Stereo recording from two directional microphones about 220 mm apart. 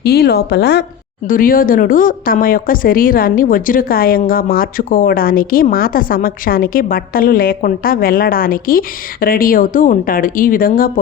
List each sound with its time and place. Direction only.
0.0 s speech: 45° left (ahead or behind)